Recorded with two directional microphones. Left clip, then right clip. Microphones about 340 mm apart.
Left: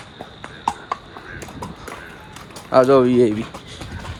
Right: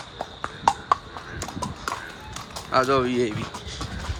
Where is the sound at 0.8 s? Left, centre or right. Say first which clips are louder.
Right 4 dB; centre.